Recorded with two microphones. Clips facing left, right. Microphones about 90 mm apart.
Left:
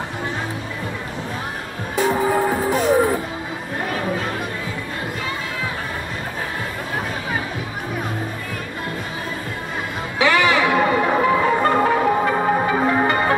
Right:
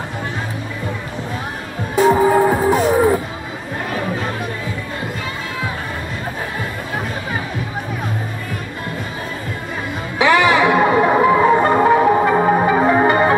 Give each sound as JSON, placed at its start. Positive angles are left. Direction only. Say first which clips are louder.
{"t": 2.0, "sound": "music", "louder": "right 6 dB", "side_deg": -25}
{"t": 10.1, "sound": "music", "louder": "right 4 dB", "side_deg": -20}